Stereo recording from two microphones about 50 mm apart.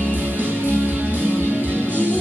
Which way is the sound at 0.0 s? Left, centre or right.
Right.